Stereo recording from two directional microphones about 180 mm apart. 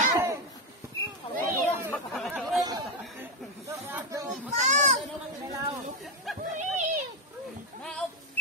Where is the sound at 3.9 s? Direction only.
15° right (ahead or behind).